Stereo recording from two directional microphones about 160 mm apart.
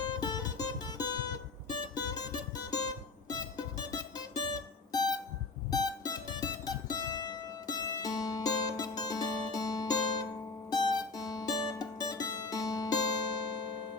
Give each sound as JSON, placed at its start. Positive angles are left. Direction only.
{"t": 0.2, "sound": "music", "side_deg": 25}
{"t": 4.9, "sound": "music", "side_deg": 25}
{"t": 5.7, "sound": "mandolin", "side_deg": 25}
{"t": 10.7, "sound": "music", "side_deg": 25}